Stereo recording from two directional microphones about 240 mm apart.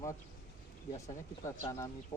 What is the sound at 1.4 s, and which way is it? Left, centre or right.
Speech, centre.